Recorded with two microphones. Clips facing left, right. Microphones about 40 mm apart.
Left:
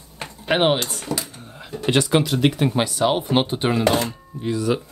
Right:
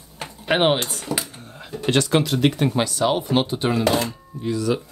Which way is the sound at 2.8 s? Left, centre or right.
Centre.